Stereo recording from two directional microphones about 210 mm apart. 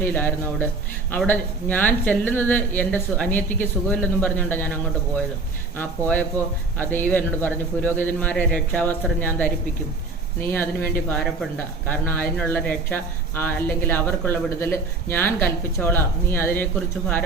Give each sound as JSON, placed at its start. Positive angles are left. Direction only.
{"t": 0.0, "sound": "speech", "side_deg": 10}
{"t": 10.5, "sound": "speech", "side_deg": 10}